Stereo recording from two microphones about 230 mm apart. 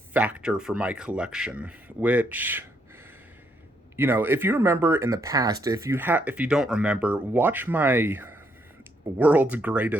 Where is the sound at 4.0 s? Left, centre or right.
Centre.